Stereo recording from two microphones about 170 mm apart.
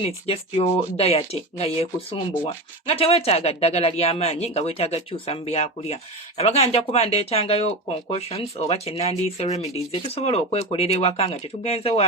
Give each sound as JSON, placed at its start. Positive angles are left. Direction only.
{"t": 0.0, "sound": "speech", "side_deg": 35}